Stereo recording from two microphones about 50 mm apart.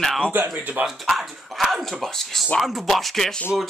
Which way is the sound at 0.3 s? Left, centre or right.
Right.